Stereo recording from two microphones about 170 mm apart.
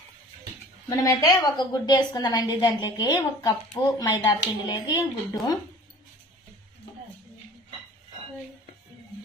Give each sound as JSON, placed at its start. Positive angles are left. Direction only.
{"t": 0.9, "sound": "a woman's voice", "side_deg": 20}